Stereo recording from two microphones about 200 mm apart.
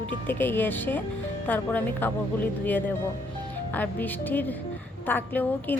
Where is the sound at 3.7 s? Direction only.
10° left (ahead or behind).